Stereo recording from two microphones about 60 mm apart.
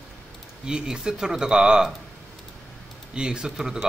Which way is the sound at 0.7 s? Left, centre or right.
Centre.